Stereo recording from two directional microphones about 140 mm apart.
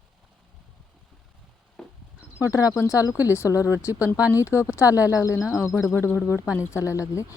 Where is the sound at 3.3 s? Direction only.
20° left (ahead or behind).